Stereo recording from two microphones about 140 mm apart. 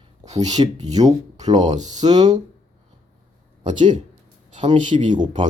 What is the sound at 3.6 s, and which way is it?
Speech, 35° right (ahead or behind).